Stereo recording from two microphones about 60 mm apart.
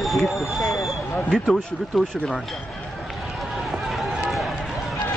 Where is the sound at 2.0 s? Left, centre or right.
Centre.